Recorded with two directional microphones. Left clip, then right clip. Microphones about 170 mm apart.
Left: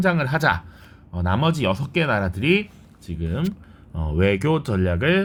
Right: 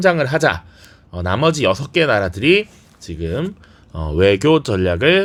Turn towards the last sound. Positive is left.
turn(degrees=-35)  # may be behind; listen again after turning